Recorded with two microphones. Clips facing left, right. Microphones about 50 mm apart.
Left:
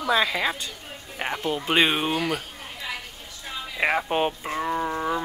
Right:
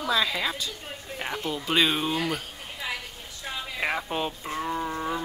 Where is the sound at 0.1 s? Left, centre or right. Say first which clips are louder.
Left 4 dB; left.